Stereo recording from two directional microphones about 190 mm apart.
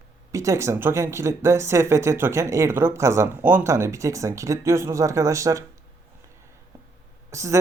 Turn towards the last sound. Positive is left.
turn(degrees=-15)  # may be behind; listen again after turning